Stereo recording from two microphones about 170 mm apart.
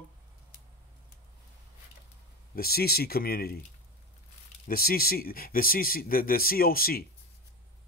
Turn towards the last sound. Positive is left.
turn(degrees=60)  # may be behind; listen again after turning